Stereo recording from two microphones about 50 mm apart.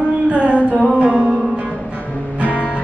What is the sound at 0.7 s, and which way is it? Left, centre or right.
Music, right.